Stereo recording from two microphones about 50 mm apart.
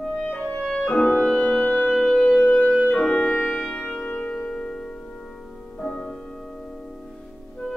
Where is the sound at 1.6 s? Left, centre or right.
Left.